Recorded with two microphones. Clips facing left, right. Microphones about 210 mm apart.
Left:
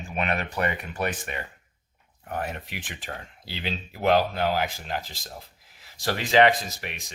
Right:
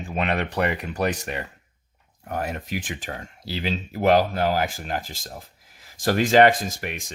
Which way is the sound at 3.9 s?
40° right (ahead or behind).